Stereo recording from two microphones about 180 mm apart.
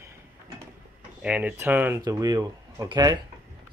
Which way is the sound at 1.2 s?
5° right (ahead or behind).